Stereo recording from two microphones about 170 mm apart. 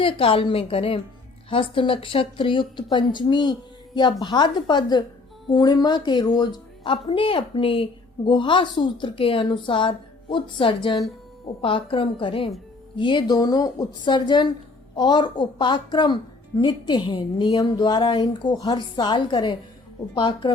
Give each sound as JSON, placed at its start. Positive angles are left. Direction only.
{"t": 0.0, "sound": "a woman's voice", "side_deg": 30}